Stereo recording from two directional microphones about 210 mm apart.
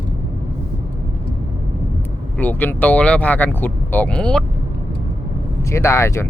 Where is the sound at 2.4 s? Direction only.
10° left (ahead or behind).